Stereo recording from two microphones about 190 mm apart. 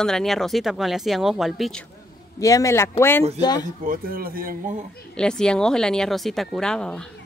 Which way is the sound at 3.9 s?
50° right (ahead or behind).